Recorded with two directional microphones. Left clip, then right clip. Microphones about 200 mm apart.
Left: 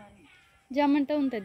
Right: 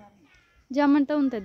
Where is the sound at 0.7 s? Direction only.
20° right (ahead or behind).